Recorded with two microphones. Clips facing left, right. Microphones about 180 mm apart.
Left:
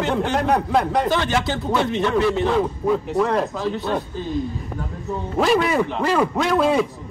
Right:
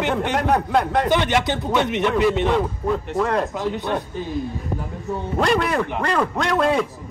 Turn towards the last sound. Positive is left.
turn(degrees=0)  # may be behind; listen again after turning